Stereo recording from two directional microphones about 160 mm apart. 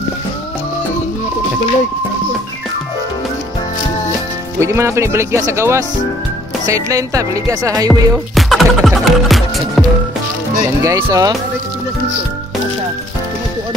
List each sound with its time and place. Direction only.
4.6 s speech: 15° right (ahead or behind)
6.6 s music: 20° right (ahead or behind)
7.9 s speech: centre (ahead or behind)
10.8 s music: 20° right (ahead or behind)